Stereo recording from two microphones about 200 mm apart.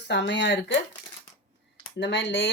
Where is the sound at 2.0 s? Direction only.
65° left (ahead or behind).